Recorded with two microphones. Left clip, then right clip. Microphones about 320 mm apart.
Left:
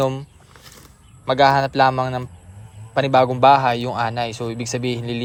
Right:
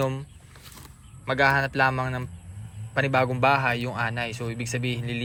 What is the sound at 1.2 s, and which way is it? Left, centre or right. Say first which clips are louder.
Speech: left 7 dB; centre.